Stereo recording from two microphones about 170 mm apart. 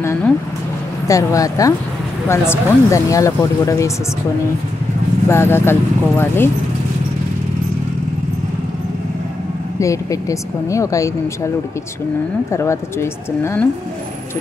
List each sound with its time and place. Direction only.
0.0 s speech: 15° left (ahead or behind)
5.3 s speech: 15° left (ahead or behind)
9.8 s speech: 20° left (ahead or behind)